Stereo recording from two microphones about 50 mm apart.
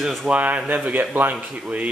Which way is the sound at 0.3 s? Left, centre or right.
Right.